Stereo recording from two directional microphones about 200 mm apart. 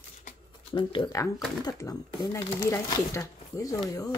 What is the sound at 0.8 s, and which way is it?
A woman's voice, 20° left (ahead or behind).